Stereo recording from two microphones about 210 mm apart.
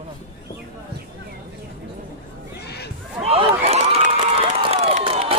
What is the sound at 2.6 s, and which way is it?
Crowd, 50° left (ahead or behind).